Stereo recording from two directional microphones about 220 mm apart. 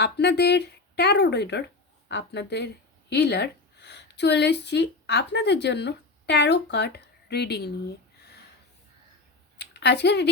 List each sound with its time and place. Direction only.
0.0 s a woman's voice: 50° left (ahead or behind)
8.2 s a sound: 45° left (ahead or behind)
9.6 s speech: 50° left (ahead or behind)